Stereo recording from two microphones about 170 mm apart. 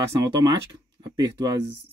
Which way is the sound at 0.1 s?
20° right (ahead or behind).